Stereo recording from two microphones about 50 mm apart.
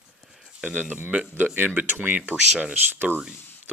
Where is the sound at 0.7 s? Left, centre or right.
Right.